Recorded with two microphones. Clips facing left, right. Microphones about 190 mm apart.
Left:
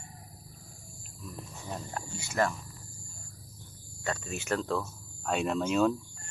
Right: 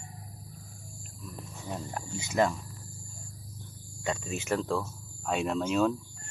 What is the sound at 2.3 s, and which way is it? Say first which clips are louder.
Speech: right 3 dB; 15° right (ahead or behind).